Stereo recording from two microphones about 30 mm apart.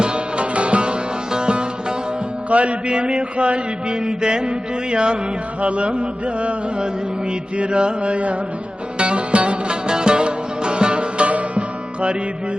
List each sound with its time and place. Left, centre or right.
0.0 s music: right
2.5 s music: right
2.9 s mantra: right
5.5 s mantra: right
9.0 s music: right
11.3 s music: right